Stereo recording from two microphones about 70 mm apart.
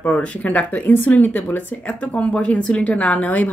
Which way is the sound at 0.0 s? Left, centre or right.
Centre.